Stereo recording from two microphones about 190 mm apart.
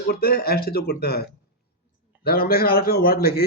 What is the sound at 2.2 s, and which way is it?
A man's voice, 55° left (ahead or behind).